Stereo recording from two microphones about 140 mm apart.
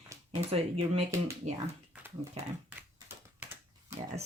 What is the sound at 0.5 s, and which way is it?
Speech, 45° right (ahead or behind).